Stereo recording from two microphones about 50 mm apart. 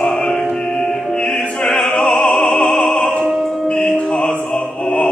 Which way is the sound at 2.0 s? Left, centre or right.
Centre.